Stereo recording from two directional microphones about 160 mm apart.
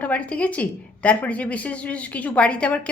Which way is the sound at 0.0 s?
10° left (ahead or behind).